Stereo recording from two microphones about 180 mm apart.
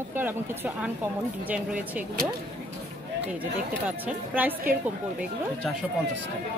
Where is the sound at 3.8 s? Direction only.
10° right (ahead or behind).